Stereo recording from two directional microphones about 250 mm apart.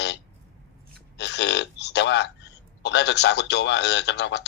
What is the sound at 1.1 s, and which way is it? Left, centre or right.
Speech, left.